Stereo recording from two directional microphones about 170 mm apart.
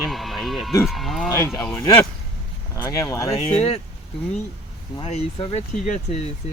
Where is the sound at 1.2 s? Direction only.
15° left (ahead or behind).